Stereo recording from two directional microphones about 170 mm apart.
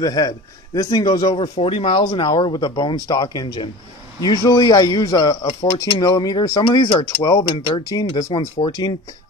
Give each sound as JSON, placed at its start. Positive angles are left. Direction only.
{"t": 0.0, "sound": "speech", "side_deg": 20}